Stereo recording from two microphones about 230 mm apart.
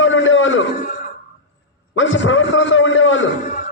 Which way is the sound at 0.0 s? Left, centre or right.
Left.